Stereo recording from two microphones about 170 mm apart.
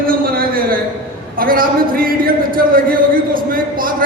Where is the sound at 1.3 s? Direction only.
55° right (ahead or behind).